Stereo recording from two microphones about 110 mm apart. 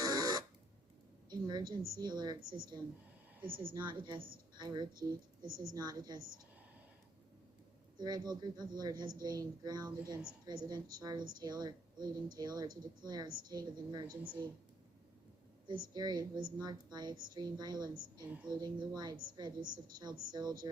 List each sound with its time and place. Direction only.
0.0 s buzzer: 40° right (ahead or behind)
1.3 s a woman's voice: 40° right (ahead or behind)
3.8 s speech: 45° right (ahead or behind)
7.9 s a woman's voice: 40° right (ahead or behind)
15.6 s a woman's voice: 40° right (ahead or behind)